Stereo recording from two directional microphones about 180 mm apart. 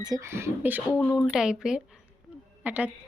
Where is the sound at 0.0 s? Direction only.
20° right (ahead or behind).